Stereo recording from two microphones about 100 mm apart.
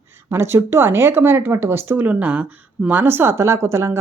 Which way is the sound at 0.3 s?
25° right (ahead or behind).